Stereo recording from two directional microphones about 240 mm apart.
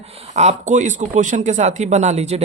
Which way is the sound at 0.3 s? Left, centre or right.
Right.